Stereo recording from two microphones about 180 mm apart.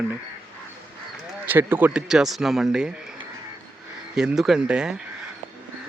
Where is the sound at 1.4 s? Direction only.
10° right (ahead or behind).